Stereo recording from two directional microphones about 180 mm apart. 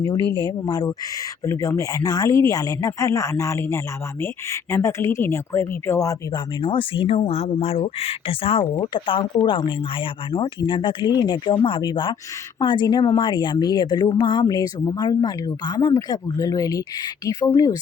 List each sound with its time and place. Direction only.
0.0 s speech: 25° left (ahead or behind)